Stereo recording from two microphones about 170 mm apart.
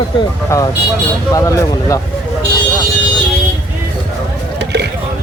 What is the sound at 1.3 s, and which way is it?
Speech, 20° left (ahead or behind).